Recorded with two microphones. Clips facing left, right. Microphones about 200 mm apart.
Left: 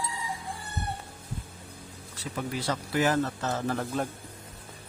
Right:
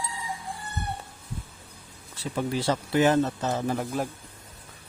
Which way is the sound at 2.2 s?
30° right (ahead or behind).